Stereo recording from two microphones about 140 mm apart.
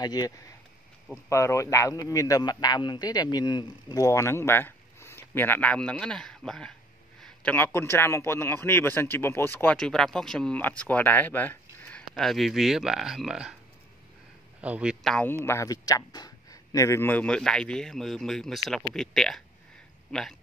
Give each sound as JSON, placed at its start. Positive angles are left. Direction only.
{"t": 0.0, "sound": "speech", "side_deg": 30}
{"t": 7.2, "sound": "a sound", "side_deg": 5}
{"t": 7.5, "sound": "speech", "side_deg": 15}
{"t": 9.8, "sound": "speech", "side_deg": 5}
{"t": 12.1, "sound": "speech", "side_deg": 0}
{"t": 14.6, "sound": "a man's voice", "side_deg": -10}
{"t": 15.4, "sound": "speech", "side_deg": 20}